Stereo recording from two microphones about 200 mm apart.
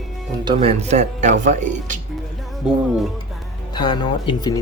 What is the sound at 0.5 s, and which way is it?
Speech, 35° right (ahead or behind).